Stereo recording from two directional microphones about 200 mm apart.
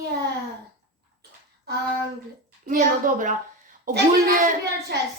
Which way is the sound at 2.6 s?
40° right (ahead or behind).